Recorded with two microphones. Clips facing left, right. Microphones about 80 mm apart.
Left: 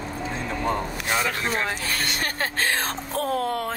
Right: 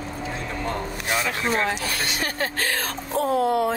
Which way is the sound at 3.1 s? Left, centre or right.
Right.